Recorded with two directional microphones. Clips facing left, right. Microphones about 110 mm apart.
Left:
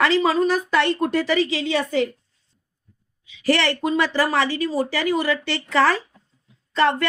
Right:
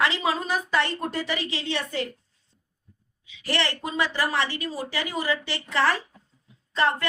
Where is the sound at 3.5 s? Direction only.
90° left.